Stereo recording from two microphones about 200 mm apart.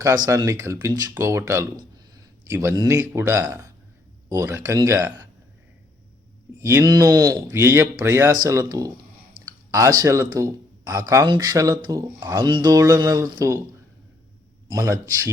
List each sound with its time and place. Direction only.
0.3 s speech: 15° right (ahead or behind)
6.6 s speech: 15° right (ahead or behind)
14.7 s speech: 15° right (ahead or behind)